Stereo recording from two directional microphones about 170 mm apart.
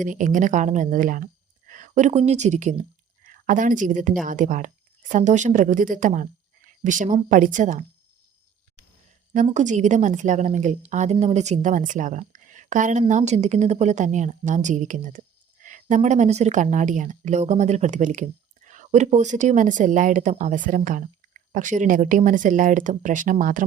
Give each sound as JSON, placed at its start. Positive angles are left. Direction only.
{"t": 0.0, "sound": "a woman's voice", "side_deg": -50}
{"t": 9.3, "sound": "a woman's voice", "side_deg": -45}